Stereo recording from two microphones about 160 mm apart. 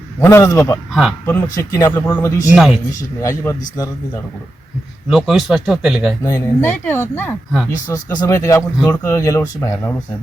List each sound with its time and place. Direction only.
0.2 s speech: 20° left (ahead or behind)
2.5 s speech: centre (ahead or behind)
3.2 s speech: 20° left (ahead or behind)
5.0 s speech: 5° right (ahead or behind)
6.2 s speech: 15° left (ahead or behind)